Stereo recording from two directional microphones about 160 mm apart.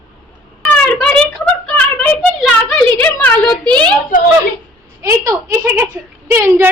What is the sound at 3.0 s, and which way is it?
Speech, 10° left (ahead or behind).